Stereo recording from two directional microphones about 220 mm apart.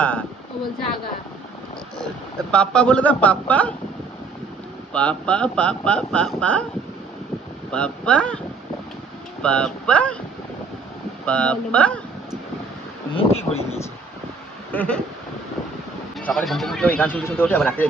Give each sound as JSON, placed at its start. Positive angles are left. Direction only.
{"t": 2.5, "sound": "speech", "side_deg": 5}
{"t": 4.9, "sound": "speech", "side_deg": 5}
{"t": 7.7, "sound": "speech", "side_deg": 5}
{"t": 9.4, "sound": "speech", "side_deg": 5}
{"t": 11.3, "sound": "speech", "side_deg": 5}
{"t": 13.1, "sound": "speech", "side_deg": 30}
{"t": 14.7, "sound": "a sound", "side_deg": 5}
{"t": 16.2, "sound": "speech", "side_deg": 0}